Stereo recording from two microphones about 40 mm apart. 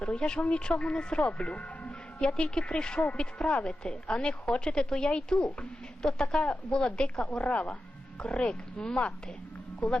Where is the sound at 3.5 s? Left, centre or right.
Left.